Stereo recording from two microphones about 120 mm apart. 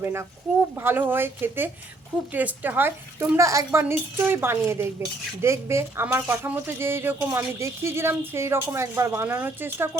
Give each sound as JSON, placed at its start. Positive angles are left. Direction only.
{"t": 0.0, "sound": "speech", "side_deg": -20}